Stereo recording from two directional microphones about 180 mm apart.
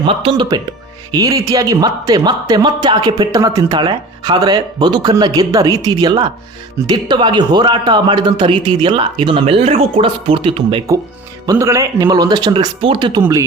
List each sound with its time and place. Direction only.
0.0 s speech: 30° right (ahead or behind)
1.1 s speech: 20° right (ahead or behind)
11.4 s speech: 15° right (ahead or behind)